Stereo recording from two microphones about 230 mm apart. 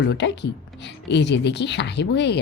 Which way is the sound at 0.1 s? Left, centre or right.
Left.